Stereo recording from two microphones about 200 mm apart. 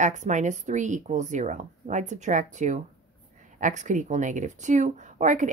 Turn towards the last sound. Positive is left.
turn(degrees=-40)  # may be behind; listen again after turning